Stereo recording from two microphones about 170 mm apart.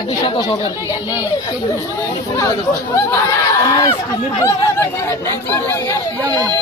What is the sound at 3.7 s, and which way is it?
Speech, 20° left (ahead or behind).